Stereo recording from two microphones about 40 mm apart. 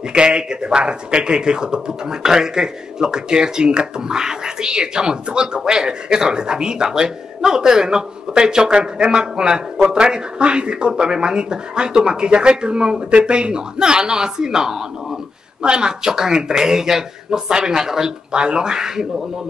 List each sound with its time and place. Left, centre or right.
0.1 s a man's voice: right